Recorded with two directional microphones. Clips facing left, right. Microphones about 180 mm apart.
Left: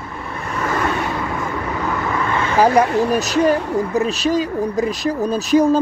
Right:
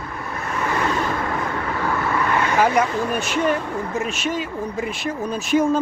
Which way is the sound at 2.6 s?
35° left (ahead or behind).